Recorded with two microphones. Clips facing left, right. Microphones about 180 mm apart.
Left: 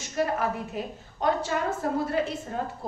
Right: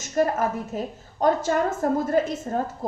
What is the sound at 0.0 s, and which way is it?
A woman's voice, 45° right (ahead or behind).